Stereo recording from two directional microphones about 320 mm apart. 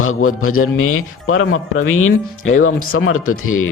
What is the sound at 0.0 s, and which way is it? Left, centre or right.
Speech, left.